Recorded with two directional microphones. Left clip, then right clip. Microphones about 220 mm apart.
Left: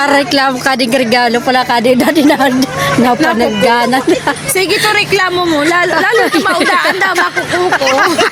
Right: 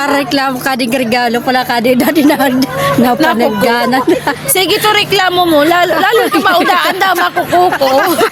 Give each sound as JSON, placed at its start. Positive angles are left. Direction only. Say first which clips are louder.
{"t": 0.9, "sound": "a woman's voice", "louder": "left 2 dB", "side_deg": 0}
{"t": 3.2, "sound": "a woman's voice", "louder": "right 1 dB", "side_deg": -45}
{"t": 3.6, "sound": "a woman's voice", "louder": "left 1 dB", "side_deg": 0}
{"t": 4.5, "sound": "a woman's voice", "louder": "right 1 dB", "side_deg": -50}
{"t": 7.9, "sound": "a woman's voice", "louder": "even", "side_deg": 0}